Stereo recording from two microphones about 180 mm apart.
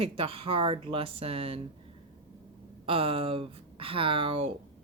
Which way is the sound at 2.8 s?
30° right (ahead or behind).